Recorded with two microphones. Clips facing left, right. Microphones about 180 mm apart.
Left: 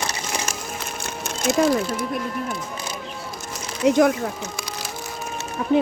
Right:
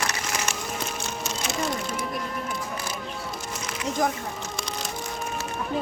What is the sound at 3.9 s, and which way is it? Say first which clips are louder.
Speech: left 10 dB; 75° left (ahead or behind).